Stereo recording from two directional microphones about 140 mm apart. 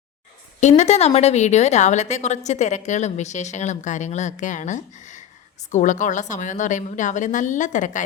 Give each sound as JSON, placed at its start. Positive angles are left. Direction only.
{"t": 0.6, "sound": "a woman's voice", "side_deg": 55}